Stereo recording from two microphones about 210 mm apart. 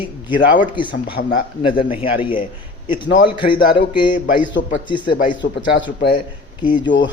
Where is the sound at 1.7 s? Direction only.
25° left (ahead or behind).